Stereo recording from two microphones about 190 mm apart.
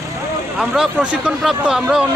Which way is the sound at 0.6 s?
5° right (ahead or behind).